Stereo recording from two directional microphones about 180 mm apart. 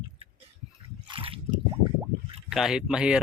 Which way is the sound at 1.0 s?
30° right (ahead or behind).